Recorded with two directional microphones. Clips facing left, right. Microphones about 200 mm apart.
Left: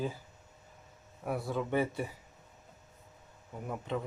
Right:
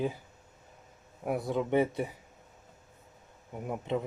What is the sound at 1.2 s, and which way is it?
Speech, 20° right (ahead or behind).